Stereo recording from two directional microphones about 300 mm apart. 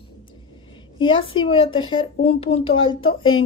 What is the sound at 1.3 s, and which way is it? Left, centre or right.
Speech, centre.